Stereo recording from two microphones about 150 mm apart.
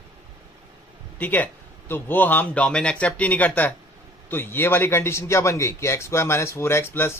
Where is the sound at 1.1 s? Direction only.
10° left (ahead or behind).